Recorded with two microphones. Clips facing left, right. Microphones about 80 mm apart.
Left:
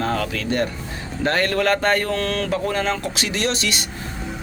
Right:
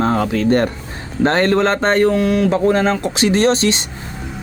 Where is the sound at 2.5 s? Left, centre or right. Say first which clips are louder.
Right 7 dB; right.